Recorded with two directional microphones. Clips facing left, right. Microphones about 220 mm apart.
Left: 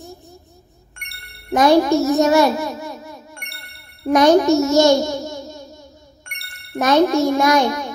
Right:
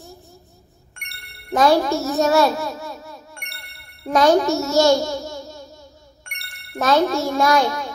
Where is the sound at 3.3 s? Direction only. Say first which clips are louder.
Left 2 dB; centre (ahead or behind).